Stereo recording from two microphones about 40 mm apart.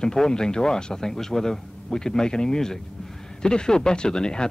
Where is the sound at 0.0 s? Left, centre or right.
Centre.